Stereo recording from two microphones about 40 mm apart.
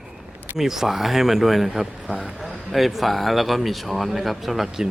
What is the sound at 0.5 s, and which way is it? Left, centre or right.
Speech, centre.